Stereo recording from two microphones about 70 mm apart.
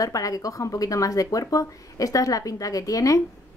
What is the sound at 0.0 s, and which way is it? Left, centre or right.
Speech, left.